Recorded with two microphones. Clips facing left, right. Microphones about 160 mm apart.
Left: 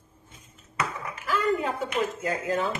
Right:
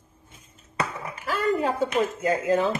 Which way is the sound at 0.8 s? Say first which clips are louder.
Right 2 dB; 30° right (ahead or behind).